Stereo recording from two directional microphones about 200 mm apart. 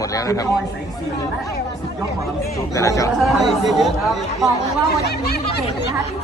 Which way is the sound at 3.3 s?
Centre (ahead or behind).